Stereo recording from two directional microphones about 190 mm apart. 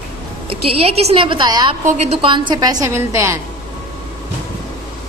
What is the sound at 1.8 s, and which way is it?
A woman's voice, 40° right (ahead or behind).